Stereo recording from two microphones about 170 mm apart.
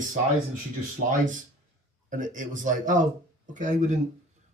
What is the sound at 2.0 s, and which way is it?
Speech, 50° right (ahead or behind).